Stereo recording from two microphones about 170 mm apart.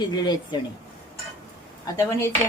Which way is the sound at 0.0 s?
25° left (ahead or behind).